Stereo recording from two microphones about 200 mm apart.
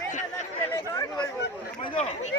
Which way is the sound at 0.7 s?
15° left (ahead or behind).